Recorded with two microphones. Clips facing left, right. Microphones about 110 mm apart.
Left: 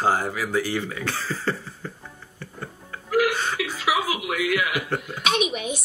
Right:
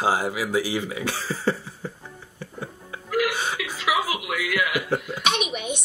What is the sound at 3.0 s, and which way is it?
Music, 45° left (ahead or behind).